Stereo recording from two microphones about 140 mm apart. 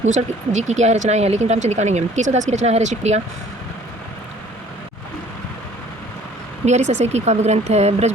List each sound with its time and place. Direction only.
0.0 s speech: 55° right (ahead or behind)
6.7 s speech: 55° right (ahead or behind)